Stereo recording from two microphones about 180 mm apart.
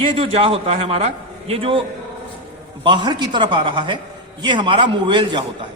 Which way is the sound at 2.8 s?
25° right (ahead or behind).